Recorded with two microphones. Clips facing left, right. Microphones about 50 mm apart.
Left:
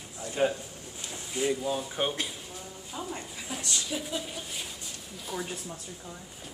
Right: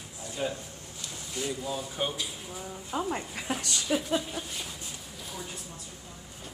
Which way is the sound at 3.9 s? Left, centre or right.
Right.